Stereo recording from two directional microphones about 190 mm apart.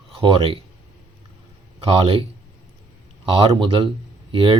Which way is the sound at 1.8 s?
30° right (ahead or behind).